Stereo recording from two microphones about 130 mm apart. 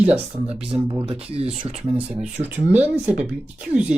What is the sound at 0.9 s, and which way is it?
Speech, 30° right (ahead or behind).